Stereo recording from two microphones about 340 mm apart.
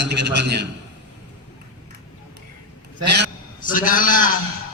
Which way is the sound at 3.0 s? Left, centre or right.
Right.